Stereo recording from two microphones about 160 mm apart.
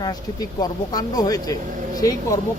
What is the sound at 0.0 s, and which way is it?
Speech, 25° left (ahead or behind).